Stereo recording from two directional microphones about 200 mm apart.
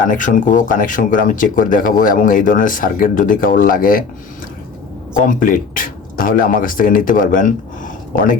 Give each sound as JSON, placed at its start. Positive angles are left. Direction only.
{"t": 0.1, "sound": "speech", "side_deg": 40}
{"t": 5.2, "sound": "speech", "side_deg": 45}